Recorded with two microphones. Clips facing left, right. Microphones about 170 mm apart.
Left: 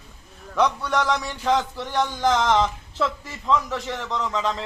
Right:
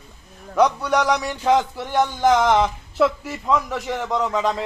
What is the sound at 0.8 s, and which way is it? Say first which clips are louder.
A man's voice: right 4 dB; 15° right (ahead or behind).